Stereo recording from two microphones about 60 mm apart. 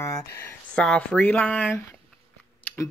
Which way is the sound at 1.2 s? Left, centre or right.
Left.